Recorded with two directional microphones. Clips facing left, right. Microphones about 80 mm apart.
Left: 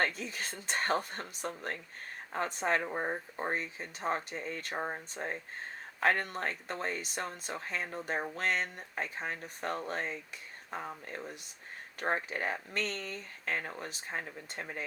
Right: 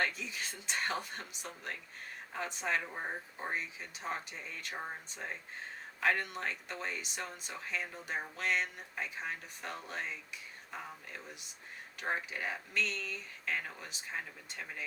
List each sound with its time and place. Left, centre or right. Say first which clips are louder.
0.0 s speech: left 3 dB; left